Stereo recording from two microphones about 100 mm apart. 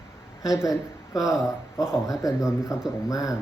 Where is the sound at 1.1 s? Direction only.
35° left (ahead or behind).